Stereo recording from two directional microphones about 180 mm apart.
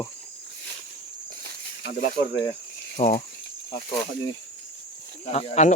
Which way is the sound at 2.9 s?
40° left (ahead or behind).